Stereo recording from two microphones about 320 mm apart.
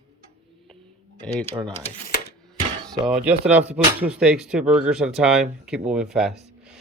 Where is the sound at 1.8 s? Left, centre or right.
Left.